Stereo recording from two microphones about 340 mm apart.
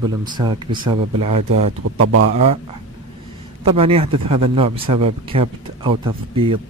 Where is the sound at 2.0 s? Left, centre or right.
Right.